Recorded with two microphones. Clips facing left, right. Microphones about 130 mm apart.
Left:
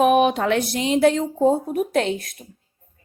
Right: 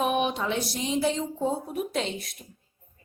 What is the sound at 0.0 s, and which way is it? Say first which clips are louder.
Speech: left 9 dB; 65° left (ahead or behind).